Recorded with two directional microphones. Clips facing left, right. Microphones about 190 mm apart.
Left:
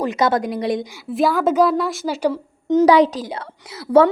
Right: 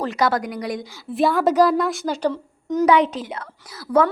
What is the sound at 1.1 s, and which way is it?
A woman's voice, centre (ahead or behind).